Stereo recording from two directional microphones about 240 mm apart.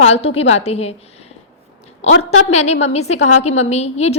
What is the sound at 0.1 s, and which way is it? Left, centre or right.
Speech, left.